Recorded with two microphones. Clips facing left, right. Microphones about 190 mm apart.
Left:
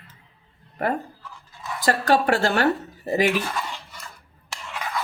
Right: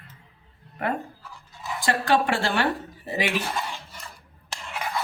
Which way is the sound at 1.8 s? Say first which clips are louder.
Left 2 dB; 40° left (ahead or behind).